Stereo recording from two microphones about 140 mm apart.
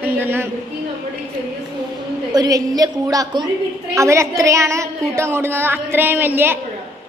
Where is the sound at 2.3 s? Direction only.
25° right (ahead or behind).